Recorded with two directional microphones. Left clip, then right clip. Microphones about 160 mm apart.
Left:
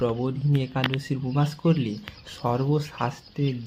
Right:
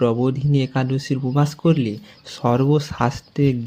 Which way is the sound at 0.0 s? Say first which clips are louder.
Right 7 dB; 25° right (ahead or behind).